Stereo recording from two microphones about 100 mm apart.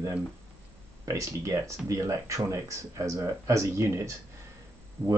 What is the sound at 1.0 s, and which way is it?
Speech, 30° right (ahead or behind).